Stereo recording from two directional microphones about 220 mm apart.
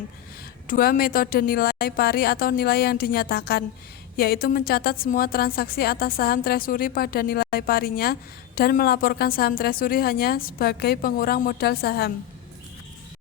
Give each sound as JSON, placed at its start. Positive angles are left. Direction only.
{"t": 0.7, "sound": "a woman's voice", "side_deg": 40}